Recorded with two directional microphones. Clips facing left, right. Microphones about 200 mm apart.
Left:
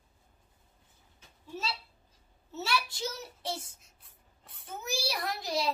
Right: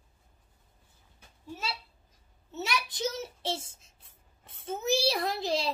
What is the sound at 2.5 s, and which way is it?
A child's voice, 15° right (ahead or behind).